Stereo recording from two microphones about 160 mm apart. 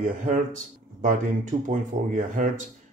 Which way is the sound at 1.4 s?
55° right (ahead or behind).